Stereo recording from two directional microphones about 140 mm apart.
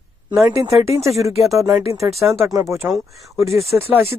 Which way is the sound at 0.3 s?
20° right (ahead or behind).